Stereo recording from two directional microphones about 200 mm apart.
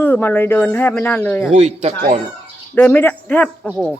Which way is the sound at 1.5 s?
35° right (ahead or behind).